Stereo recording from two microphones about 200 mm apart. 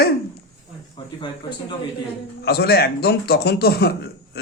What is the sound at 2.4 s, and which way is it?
Speech, 50° left (ahead or behind).